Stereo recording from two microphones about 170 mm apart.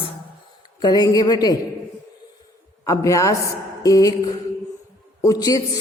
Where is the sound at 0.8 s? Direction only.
25° left (ahead or behind).